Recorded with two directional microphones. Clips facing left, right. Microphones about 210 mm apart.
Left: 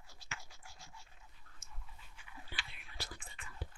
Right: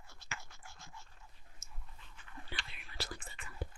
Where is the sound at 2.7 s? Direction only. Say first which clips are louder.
Right 4 dB; 90° right.